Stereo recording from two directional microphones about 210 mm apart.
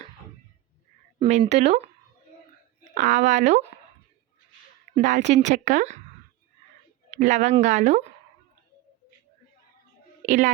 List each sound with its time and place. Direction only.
1.2 s speech: 30° right (ahead or behind)
4.9 s speech: 35° right (ahead or behind)
7.1 s speech: 35° right (ahead or behind)
10.2 s speech: 35° right (ahead or behind)